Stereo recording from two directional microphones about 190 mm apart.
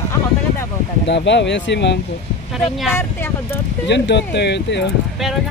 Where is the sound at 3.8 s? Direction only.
65° left (ahead or behind).